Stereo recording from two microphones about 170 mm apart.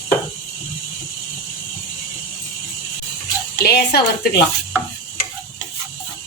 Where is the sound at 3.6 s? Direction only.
70° left (ahead or behind).